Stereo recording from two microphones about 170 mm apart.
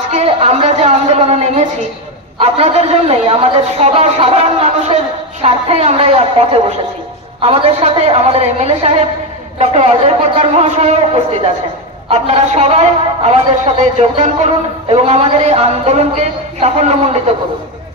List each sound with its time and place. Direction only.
0.1 s a man's voice: 40° right (ahead or behind)